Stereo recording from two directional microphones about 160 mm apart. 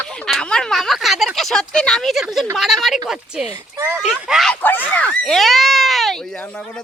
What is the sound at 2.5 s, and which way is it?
Speech, centre (ahead or behind).